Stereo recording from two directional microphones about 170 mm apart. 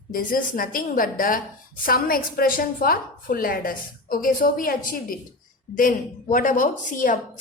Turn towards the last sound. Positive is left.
turn(degrees=50)  # may be behind; listen again after turning